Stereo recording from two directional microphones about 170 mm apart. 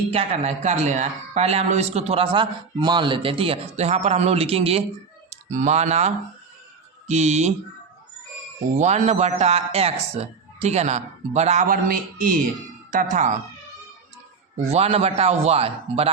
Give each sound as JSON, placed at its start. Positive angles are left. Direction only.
{"t": 0.1, "sound": "a man's voice", "side_deg": -40}
{"t": 8.8, "sound": "a man's voice", "side_deg": -40}
{"t": 14.7, "sound": "a man's voice", "side_deg": -40}